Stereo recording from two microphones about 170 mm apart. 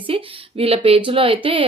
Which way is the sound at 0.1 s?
30° right (ahead or behind).